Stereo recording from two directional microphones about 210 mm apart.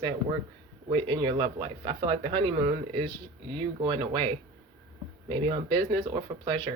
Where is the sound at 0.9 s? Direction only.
20° right (ahead or behind).